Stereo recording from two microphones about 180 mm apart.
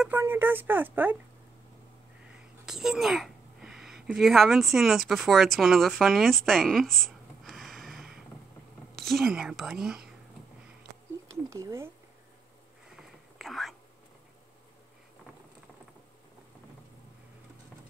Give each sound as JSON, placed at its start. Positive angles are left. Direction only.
{"t": 0.0, "sound": "speech", "side_deg": -10}
{"t": 2.3, "sound": "a sound", "side_deg": -5}
{"t": 4.7, "sound": "speech", "side_deg": 0}
{"t": 11.2, "sound": "speech", "side_deg": -15}
{"t": 12.9, "sound": "whispering", "side_deg": 0}